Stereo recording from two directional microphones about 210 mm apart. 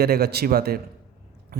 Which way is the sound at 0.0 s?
50° right (ahead or behind).